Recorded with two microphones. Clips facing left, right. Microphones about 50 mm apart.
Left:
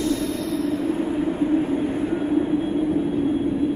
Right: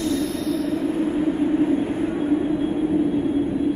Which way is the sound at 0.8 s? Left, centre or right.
Centre.